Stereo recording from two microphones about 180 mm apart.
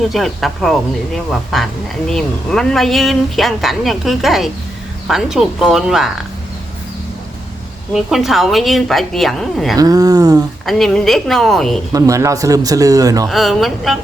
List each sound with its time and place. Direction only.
0.1 s speech: centre (ahead or behind)
7.9 s speech: centre (ahead or behind)
9.7 s speech: 20° right (ahead or behind)
10.7 s speech: centre (ahead or behind)
11.9 s speech: 20° right (ahead or behind)
13.2 s speech: centre (ahead or behind)